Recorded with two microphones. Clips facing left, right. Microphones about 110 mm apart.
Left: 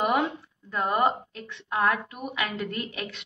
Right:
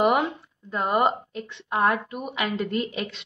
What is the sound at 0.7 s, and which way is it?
A woman's voice, 20° right (ahead or behind).